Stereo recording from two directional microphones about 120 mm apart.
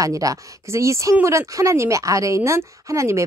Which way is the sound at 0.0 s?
30° right (ahead or behind).